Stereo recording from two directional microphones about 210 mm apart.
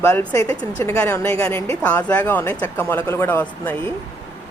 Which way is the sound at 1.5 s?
30° right (ahead or behind).